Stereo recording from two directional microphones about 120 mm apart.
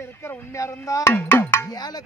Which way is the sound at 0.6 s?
25° left (ahead or behind).